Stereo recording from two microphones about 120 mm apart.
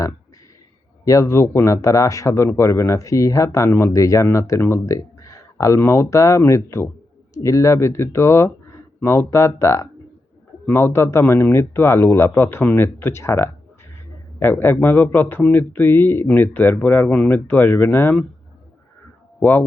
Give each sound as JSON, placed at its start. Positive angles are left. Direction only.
{"t": 1.0, "sound": "a man's voice", "side_deg": 25}
{"t": 19.4, "sound": "speech", "side_deg": 15}